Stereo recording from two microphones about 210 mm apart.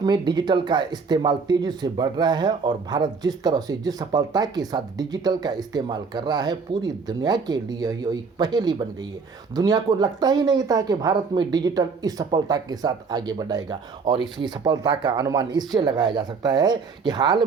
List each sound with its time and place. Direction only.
0.0 s speech: 20° right (ahead or behind)